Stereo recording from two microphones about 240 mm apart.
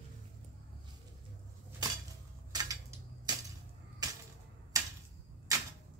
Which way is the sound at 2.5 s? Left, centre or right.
Centre.